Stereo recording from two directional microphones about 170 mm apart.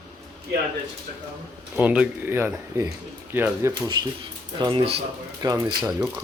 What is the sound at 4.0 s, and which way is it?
Speech, 25° right (ahead or behind).